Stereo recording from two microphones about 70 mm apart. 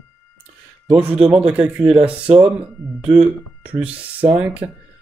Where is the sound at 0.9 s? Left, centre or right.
Right.